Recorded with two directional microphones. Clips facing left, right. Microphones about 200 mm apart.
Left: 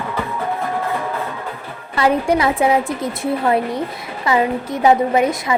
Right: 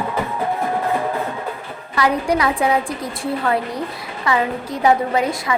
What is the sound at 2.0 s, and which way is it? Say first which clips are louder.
A woman's voice: left 2 dB; 25° left (ahead or behind).